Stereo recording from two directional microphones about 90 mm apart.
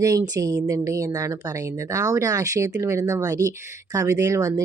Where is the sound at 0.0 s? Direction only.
40° right (ahead or behind).